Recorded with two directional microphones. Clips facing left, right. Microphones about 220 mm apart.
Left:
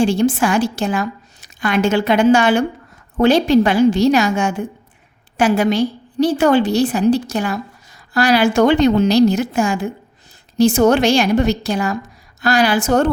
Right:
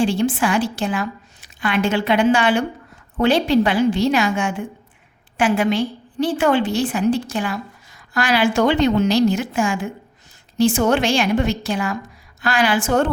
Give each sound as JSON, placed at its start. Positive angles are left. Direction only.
{"t": 0.0, "sound": "a woman's voice", "side_deg": 45}